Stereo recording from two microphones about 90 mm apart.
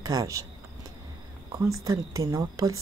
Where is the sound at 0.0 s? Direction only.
40° right (ahead or behind).